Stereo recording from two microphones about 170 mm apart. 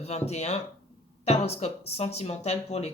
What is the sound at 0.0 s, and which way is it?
Speech, 40° left (ahead or behind).